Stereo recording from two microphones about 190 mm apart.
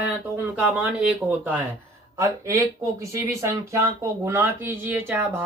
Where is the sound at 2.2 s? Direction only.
15° right (ahead or behind).